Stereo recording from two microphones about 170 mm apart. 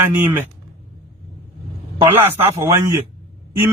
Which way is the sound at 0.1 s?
10° right (ahead or behind).